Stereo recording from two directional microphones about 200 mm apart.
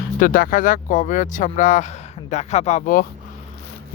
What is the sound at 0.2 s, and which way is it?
Speech, 45° left (ahead or behind).